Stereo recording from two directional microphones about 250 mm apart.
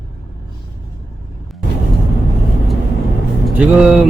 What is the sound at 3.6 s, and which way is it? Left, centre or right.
Speech, centre.